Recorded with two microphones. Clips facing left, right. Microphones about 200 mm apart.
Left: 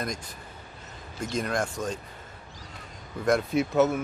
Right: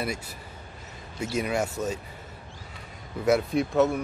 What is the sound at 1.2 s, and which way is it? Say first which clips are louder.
Speech: right 2 dB; 10° right (ahead or behind).